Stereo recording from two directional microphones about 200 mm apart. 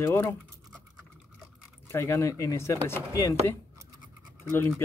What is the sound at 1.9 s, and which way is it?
Speech, 15° left (ahead or behind).